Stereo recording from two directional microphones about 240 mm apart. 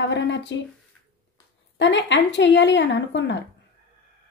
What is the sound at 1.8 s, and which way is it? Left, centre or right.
A woman's voice, left.